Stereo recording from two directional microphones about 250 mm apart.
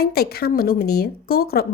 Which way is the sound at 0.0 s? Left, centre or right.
Left.